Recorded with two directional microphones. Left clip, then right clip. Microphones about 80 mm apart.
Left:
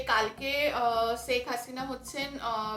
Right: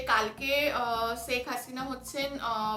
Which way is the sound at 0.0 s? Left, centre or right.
Right.